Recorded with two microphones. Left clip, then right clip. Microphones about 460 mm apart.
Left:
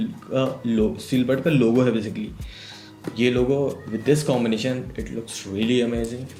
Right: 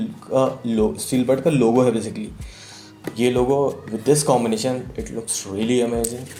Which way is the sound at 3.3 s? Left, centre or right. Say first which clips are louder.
Right 3 dB; right.